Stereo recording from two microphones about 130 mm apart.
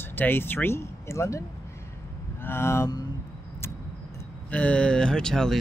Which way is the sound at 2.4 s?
20° left (ahead or behind).